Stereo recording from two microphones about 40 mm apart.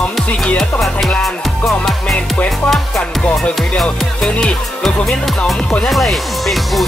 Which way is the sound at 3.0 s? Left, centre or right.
Left.